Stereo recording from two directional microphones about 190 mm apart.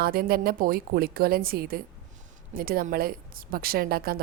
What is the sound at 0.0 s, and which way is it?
A woman's voice, 55° right (ahead or behind).